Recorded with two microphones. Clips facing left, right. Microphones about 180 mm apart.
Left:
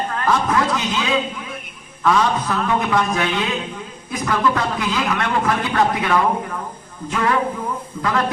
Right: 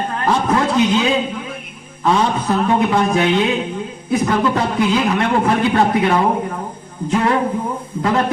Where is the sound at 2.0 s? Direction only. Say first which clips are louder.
Right 1 dB; 30° right (ahead or behind).